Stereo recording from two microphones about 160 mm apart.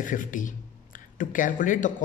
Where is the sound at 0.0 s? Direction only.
55° left (ahead or behind).